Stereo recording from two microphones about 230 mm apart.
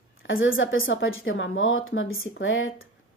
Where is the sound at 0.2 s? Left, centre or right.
Left.